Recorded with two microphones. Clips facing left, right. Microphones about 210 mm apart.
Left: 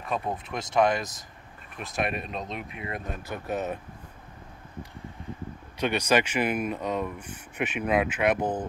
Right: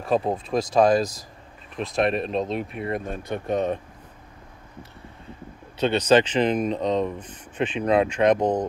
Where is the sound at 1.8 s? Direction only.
30° right (ahead or behind).